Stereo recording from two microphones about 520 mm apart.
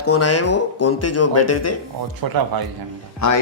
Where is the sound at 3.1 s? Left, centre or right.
Left.